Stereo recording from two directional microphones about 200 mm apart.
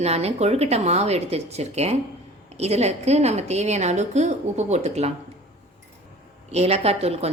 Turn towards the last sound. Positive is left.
turn(degrees=-30)  # may be behind; listen again after turning